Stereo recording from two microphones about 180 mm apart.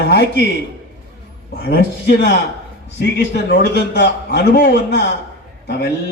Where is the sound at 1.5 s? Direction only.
60° left (ahead or behind).